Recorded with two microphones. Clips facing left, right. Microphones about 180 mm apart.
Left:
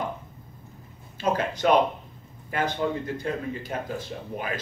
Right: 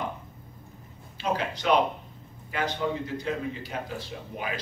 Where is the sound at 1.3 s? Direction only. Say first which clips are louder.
Left 3 dB; 45° left (ahead or behind).